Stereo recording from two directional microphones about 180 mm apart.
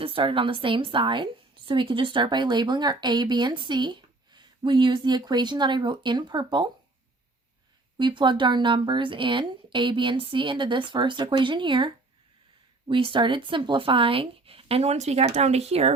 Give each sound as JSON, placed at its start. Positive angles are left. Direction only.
{"t": 0.0, "sound": "a woman's voice", "side_deg": -30}
{"t": 7.9, "sound": "a woman's voice", "side_deg": -25}
{"t": 12.9, "sound": "speech", "side_deg": -25}